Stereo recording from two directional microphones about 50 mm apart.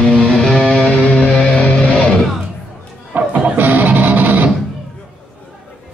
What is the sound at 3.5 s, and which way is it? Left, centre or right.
Music, right.